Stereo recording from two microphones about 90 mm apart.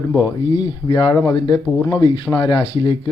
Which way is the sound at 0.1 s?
40° left (ahead or behind).